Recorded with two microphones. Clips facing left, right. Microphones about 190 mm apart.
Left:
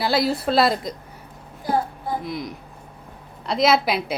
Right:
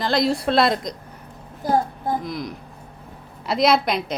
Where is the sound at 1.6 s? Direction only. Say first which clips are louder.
Right 2 dB; 45° right (ahead or behind).